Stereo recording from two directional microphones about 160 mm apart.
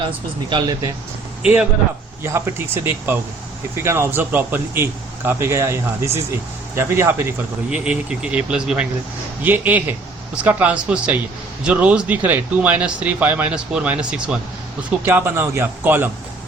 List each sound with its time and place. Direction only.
0.5 s speech: 25° right (ahead or behind)
1.4 s a man's voice: 5° right (ahead or behind)